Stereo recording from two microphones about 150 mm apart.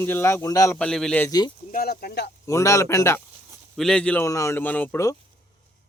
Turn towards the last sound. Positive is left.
turn(degrees=15)  # may be behind; listen again after turning